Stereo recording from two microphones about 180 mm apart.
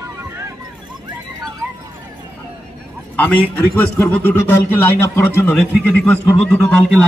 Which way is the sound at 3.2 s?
10° left (ahead or behind).